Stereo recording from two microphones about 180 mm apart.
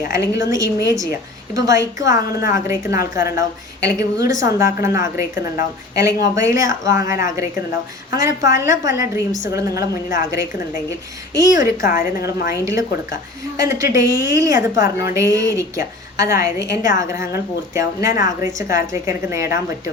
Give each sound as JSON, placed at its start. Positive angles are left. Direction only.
{"t": 0.0, "sound": "a woman's voice", "side_deg": -15}
{"t": 11.3, "sound": "a woman's voice", "side_deg": -20}